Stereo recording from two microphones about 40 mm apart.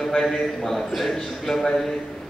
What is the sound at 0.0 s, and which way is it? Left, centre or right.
A man's voice, centre.